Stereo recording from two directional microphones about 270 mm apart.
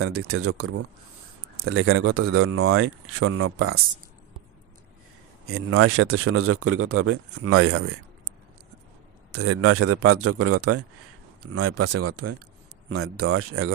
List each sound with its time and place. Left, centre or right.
0.0 s speech: right
5.5 s speech: right
9.3 s a man's voice: right